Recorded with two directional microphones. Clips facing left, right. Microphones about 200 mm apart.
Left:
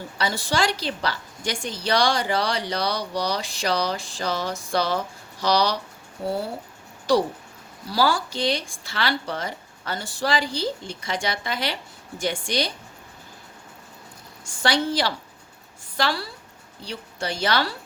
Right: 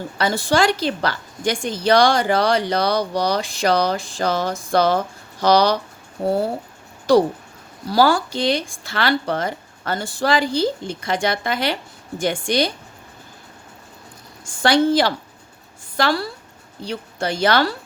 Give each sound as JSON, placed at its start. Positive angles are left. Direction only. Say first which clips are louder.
{"t": 0.2, "sound": "a woman's voice", "louder": "right 6 dB", "side_deg": -50}
{"t": 14.4, "sound": "a woman's voice", "louder": "right 7 dB", "side_deg": -50}